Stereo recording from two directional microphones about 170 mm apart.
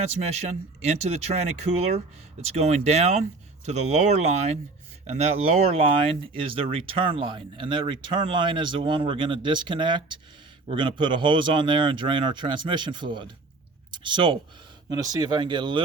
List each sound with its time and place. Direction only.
0.1 s speech: 40° right (ahead or behind)